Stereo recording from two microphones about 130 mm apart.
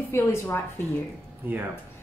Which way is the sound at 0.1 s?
20° left (ahead or behind).